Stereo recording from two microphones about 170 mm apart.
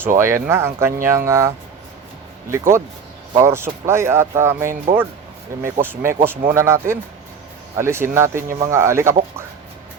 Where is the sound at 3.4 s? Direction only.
15° right (ahead or behind).